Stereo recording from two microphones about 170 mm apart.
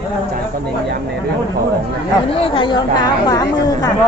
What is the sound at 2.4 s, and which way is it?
A woman's voice, 30° left (ahead or behind).